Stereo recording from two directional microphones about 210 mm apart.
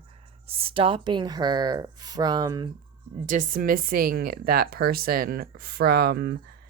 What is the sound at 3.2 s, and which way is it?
Speech, 40° right (ahead or behind).